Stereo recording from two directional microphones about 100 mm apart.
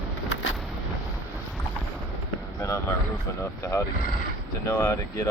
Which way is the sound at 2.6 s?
30° left (ahead or behind).